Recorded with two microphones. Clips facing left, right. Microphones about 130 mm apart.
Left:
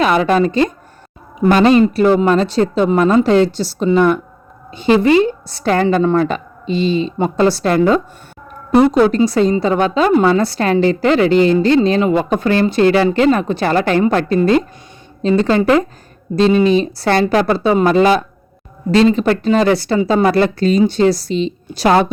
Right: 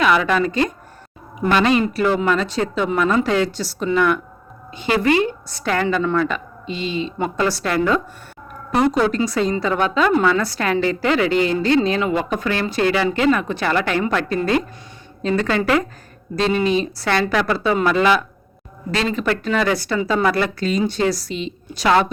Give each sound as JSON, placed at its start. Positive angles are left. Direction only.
{"t": 0.0, "sound": "a woman's voice", "side_deg": 35}